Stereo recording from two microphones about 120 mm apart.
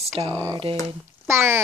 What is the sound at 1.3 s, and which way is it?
Speech, 20° right (ahead or behind).